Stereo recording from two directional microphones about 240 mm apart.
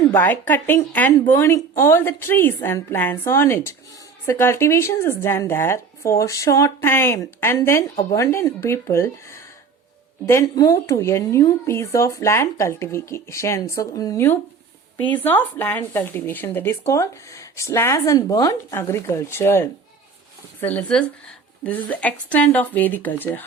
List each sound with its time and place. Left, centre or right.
0.1 s speech: centre